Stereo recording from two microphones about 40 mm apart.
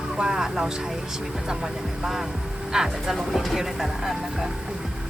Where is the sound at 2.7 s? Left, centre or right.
Centre.